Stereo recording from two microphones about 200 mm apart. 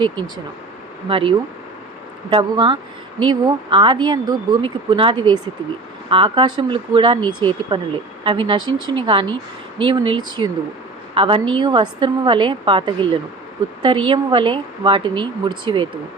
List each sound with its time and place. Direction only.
1.0 s speech: 25° right (ahead or behind)